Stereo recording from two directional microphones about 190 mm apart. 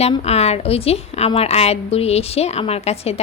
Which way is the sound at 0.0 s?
35° left (ahead or behind).